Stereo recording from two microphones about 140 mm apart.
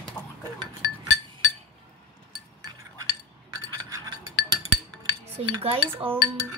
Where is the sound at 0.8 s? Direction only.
25° right (ahead or behind).